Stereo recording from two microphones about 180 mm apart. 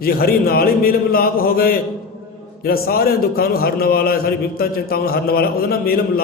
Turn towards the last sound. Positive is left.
turn(degrees=55)  # may be behind; listen again after turning